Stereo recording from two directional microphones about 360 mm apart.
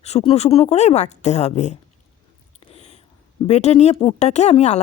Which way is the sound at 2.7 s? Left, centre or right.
Centre.